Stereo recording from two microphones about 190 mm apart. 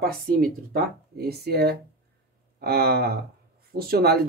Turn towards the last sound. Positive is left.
turn(degrees=-55)  # may be behind; listen again after turning